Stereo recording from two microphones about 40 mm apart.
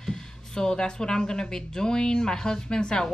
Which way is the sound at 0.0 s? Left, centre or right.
Centre.